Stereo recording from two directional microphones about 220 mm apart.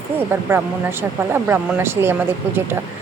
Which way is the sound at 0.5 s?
10° right (ahead or behind).